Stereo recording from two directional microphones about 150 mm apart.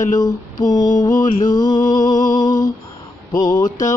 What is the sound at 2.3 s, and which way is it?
Humming, 30° left (ahead or behind).